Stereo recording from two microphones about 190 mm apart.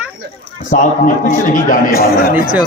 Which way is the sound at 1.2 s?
45° left (ahead or behind).